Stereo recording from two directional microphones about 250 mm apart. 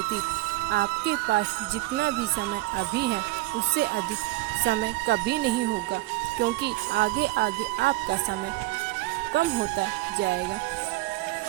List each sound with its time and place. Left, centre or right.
0.7 s speech: right
2.9 s speech: right
4.6 s speech: right
6.9 s speech: right
9.3 s speech: right